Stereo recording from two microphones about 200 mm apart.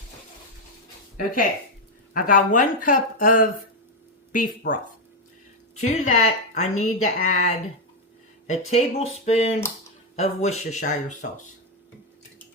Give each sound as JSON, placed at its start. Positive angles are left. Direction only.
{"t": 2.1, "sound": "speech", "side_deg": 40}
{"t": 4.7, "sound": "a woman's voice", "side_deg": 40}
{"t": 5.8, "sound": "a woman's voice", "side_deg": 35}